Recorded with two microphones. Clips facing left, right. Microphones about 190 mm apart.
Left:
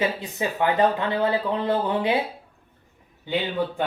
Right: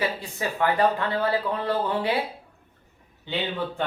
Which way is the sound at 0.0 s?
20° left (ahead or behind).